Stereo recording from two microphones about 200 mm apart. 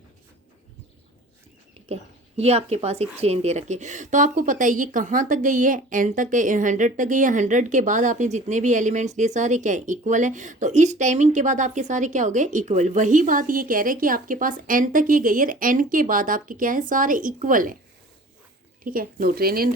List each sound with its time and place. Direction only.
1.9 s speech: 30° right (ahead or behind)
18.9 s speech: 45° right (ahead or behind)